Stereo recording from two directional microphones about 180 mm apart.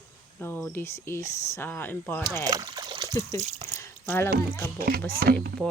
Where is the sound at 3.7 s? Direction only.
15° left (ahead or behind).